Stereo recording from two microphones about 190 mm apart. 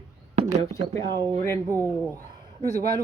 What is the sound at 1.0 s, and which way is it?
Speech, 20° right (ahead or behind).